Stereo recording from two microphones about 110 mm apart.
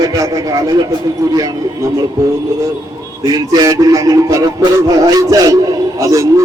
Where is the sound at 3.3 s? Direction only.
35° right (ahead or behind).